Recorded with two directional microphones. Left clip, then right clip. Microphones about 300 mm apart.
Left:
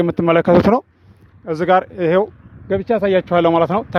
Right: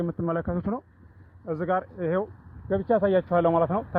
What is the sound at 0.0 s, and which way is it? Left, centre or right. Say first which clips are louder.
Speech: left 14 dB; left.